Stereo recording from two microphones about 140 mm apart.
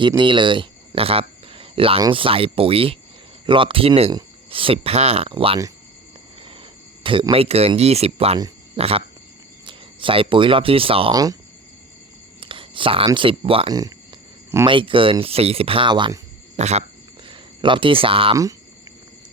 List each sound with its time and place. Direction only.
0.2 s cricket: 35° right (ahead or behind)
2.0 s speech: 35° right (ahead or behind)
7.0 s speech: 40° right (ahead or behind)
11.1 s speech: 25° right (ahead or behind)
12.4 s whispering: 35° right (ahead or behind)
13.1 s speech: 40° right (ahead or behind)
13.7 s a sound: 25° right (ahead or behind)
14.7 s speech: 40° right (ahead or behind)
16.6 s speech: 50° right (ahead or behind)
17.2 s speech: 35° right (ahead or behind)